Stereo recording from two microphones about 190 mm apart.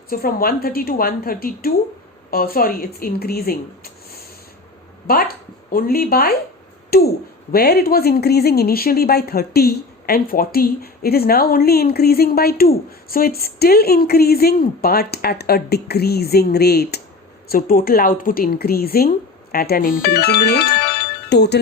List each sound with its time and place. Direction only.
0.1 s speech: 50° left (ahead or behind)